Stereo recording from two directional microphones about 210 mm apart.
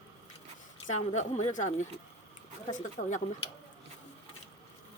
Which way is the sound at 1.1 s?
35° left (ahead or behind).